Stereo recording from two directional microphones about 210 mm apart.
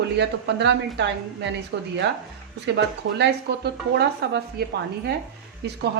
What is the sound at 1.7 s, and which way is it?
A woman's voice, 55° right (ahead or behind).